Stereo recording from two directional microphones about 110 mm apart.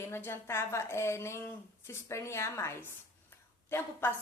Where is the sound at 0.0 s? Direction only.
20° left (ahead or behind).